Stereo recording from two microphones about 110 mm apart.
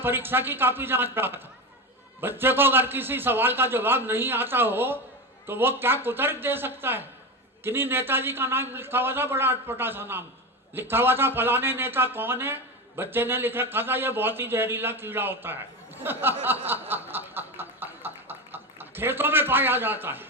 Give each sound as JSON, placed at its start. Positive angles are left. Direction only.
{"t": 0.0, "sound": "speech", "side_deg": -20}
{"t": 16.9, "sound": "snicker", "side_deg": -20}